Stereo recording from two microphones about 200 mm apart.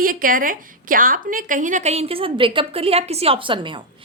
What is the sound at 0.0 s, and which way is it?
A woman's voice, 45° right (ahead or behind).